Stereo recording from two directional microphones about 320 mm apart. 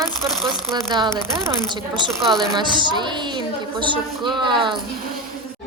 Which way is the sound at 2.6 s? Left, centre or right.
Centre.